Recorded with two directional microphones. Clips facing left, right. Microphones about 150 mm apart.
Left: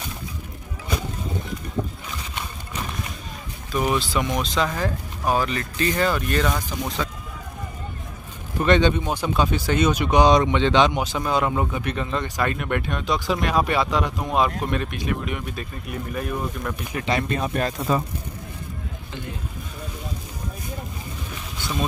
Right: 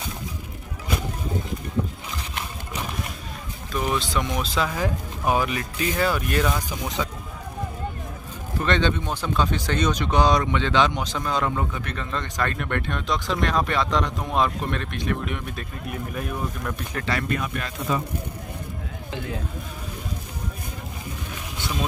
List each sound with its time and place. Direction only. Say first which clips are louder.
3.7 s speech: left 2 dB; 5° left (ahead or behind)
7.0 s a sound: right 2 dB; 10° right (ahead or behind)
8.5 s speech: left 4 dB; 15° left (ahead or behind)
16.9 s speech: left 3 dB; 20° left (ahead or behind); by 18.0 s 40° left (ahead or behind)